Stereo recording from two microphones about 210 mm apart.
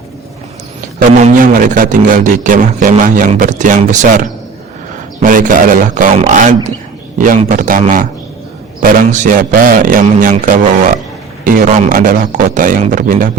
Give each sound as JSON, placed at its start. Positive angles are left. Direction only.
{"t": 1.2, "sound": "speech", "side_deg": -40}